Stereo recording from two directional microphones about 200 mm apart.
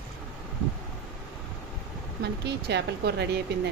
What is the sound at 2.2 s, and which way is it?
Speech, 55° right (ahead or behind).